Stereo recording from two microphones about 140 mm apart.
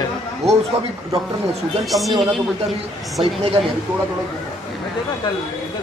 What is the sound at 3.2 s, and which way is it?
Speech, 45° right (ahead or behind).